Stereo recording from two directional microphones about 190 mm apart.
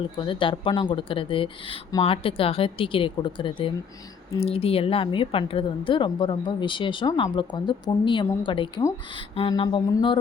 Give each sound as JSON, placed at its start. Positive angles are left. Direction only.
{"t": 0.0, "sound": "a woman's voice", "side_deg": 25}